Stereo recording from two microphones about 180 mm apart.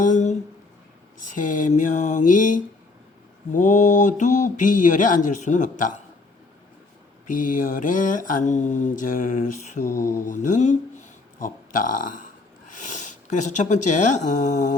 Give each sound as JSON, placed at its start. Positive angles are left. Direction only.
{"t": 0.0, "sound": "a sound", "side_deg": 45}
{"t": 1.2, "sound": "mantra", "side_deg": 45}
{"t": 7.3, "sound": "mantra", "side_deg": 45}
{"t": 9.9, "sound": "mantra", "side_deg": 15}
{"t": 10.2, "sound": "mantra", "side_deg": 45}
{"t": 11.3, "sound": "speech", "side_deg": 50}